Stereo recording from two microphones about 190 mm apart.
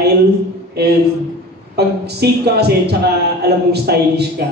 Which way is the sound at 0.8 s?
60° right (ahead or behind).